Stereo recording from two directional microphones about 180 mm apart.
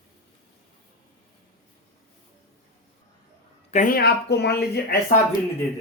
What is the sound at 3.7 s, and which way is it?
Speech, 45° left (ahead or behind).